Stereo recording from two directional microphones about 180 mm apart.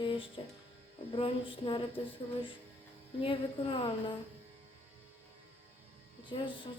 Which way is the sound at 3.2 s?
30° left (ahead or behind).